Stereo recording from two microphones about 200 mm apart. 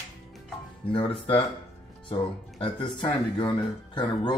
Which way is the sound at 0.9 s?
25° left (ahead or behind).